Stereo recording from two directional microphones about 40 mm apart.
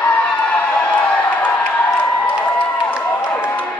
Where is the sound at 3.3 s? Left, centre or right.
Left.